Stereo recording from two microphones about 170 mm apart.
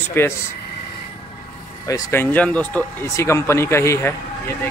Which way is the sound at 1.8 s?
20° left (ahead or behind).